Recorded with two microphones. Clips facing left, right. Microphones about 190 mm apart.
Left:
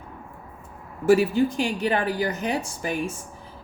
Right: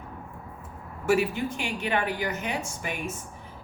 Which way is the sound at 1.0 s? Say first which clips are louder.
Left 6 dB; 35° left (ahead or behind).